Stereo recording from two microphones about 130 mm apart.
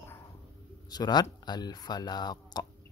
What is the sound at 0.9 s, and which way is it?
Speech, 30° left (ahead or behind).